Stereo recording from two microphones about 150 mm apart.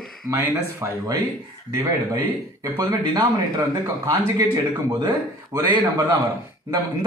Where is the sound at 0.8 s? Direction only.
20° right (ahead or behind).